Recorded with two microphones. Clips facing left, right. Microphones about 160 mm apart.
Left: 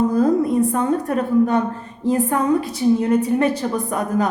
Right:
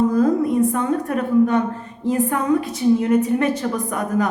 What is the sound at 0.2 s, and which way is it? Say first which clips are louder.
A woman's voice: even; 35° left (ahead or behind).